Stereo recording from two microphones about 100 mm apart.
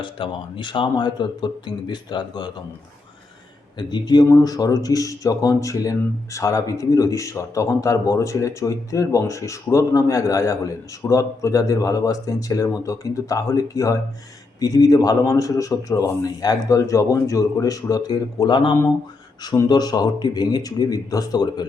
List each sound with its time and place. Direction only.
0.0 s speech: 55° left (ahead or behind)
3.8 s speech: 45° left (ahead or behind)